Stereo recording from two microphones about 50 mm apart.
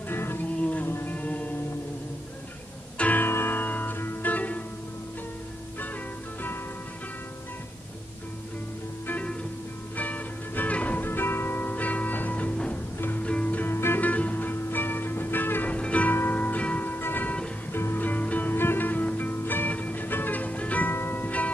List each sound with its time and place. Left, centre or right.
0.1 s music: left
0.6 s music: left
0.8 s music: left
1.1 s music: left
3.2 s music: left
3.5 s music: left
9.9 s music: left
11.1 s music: left
13.7 s music: left
14.0 s music: left
15.7 s music: left
16.1 s music: left
20.9 s music: left